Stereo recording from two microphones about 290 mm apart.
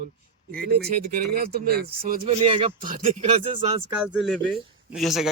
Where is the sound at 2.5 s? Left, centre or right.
Centre.